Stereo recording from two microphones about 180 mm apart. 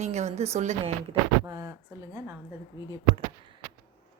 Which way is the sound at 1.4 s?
15° right (ahead or behind).